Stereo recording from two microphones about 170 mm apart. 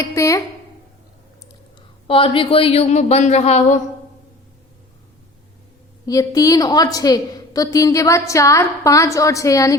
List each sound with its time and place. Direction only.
0.0 s speech: 20° left (ahead or behind)
2.0 s speech: 30° left (ahead or behind)
6.1 s a woman's voice: 20° left (ahead or behind)